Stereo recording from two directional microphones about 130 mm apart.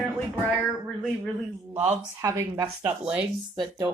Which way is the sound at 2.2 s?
25° right (ahead or behind).